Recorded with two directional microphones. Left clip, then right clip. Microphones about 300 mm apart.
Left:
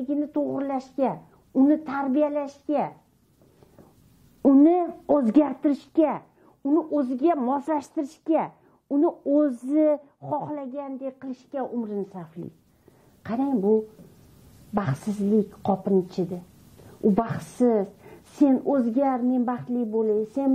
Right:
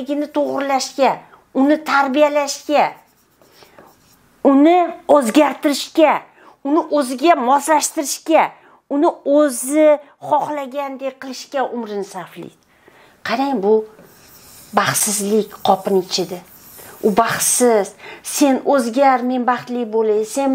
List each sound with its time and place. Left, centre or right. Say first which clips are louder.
0.0 s a woman's voice: right 7 dB; centre
4.4 s a woman's voice: right 7 dB; centre
9.1 s a woman's voice: right 8 dB; right
9.4 s a woman's voice: right 8 dB; centre